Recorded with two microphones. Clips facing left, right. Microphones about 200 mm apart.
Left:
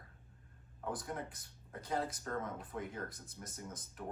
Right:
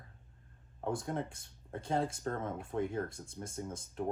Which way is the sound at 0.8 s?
25° right (ahead or behind).